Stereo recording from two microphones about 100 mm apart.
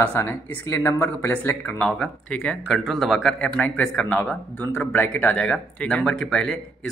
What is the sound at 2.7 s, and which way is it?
Speech, centre (ahead or behind).